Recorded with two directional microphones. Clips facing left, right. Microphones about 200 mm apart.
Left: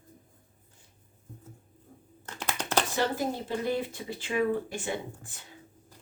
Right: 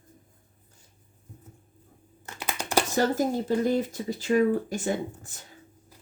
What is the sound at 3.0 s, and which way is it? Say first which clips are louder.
Speech: right 5 dB; 45° right (ahead or behind).